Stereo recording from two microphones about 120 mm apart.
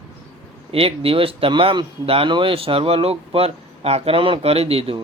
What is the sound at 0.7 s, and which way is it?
Speech, 50° right (ahead or behind).